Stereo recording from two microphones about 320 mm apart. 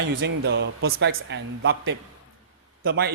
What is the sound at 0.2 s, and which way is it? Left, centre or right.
Speech, right.